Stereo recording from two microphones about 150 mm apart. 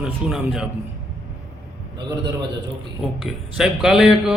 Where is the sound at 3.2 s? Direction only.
5° right (ahead or behind).